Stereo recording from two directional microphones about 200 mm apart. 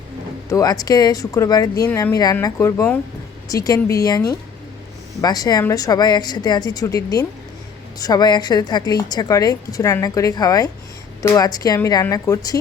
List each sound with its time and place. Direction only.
0.4 s a woman's voice: 15° left (ahead or behind)